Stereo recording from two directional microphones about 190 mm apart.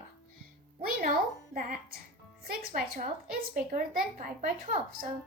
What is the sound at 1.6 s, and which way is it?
Speech, 45° right (ahead or behind).